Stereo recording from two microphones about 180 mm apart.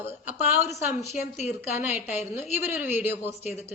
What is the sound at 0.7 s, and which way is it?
Speech, 15° right (ahead or behind).